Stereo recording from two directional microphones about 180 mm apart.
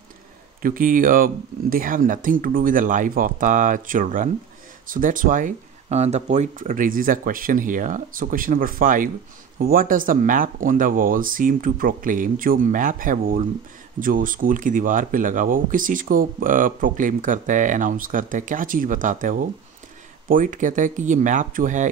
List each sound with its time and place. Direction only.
0.6 s speech: 50° right (ahead or behind)